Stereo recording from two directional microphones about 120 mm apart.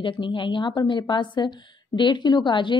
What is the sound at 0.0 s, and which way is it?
A woman's voice, 40° left (ahead or behind).